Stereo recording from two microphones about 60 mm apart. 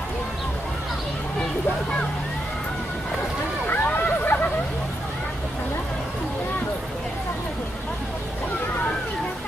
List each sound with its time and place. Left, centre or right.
3.6 s hubbub: left